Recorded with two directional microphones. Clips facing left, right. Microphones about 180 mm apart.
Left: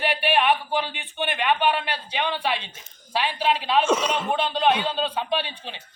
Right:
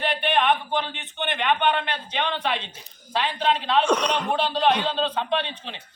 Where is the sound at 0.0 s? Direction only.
10° left (ahead or behind).